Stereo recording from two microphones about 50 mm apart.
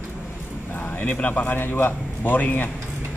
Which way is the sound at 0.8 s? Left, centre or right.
Left.